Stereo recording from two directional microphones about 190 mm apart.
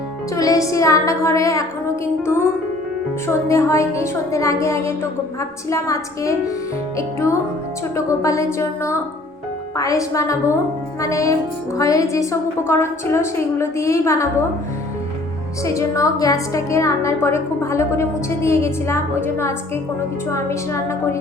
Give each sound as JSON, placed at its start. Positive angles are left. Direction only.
{"t": 0.3, "sound": "a woman's voice", "side_deg": 15}
{"t": 3.5, "sound": "a woman's voice", "side_deg": 15}
{"t": 7.9, "sound": "a woman's voice", "side_deg": 15}
{"t": 15.6, "sound": "a woman's voice", "side_deg": 15}